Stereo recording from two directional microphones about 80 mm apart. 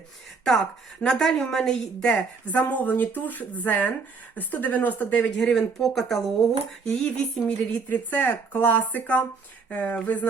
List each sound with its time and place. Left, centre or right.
1.0 s speech: centre
2.5 s a woman's voice: centre
5.4 s speech: centre